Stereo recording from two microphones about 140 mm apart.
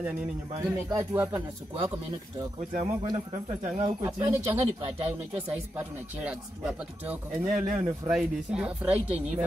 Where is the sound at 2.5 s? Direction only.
75° right (ahead or behind).